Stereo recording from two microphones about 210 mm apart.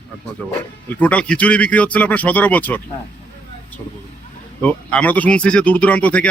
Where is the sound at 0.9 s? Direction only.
5° left (ahead or behind).